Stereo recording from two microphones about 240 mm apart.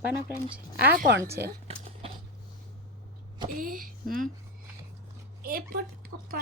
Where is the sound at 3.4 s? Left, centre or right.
Right.